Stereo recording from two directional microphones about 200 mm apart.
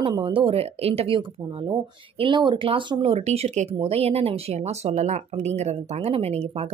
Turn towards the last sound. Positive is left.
turn(degrees=-30)  # may be behind; listen again after turning